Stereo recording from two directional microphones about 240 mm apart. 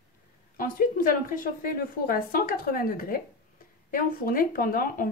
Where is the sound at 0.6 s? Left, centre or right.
Left.